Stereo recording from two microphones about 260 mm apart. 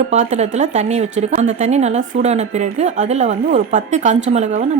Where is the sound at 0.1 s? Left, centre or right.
Right.